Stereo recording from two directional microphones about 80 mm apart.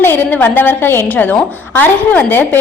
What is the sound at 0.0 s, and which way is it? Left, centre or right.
A woman's voice, left.